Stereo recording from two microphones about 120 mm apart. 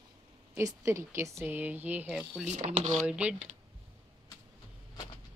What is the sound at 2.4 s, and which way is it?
Speech, 80° right.